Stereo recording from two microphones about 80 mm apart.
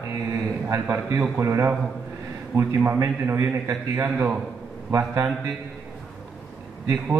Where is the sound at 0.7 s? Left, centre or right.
Right.